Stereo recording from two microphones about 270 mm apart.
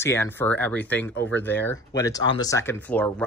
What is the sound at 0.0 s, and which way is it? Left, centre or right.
Speech, centre.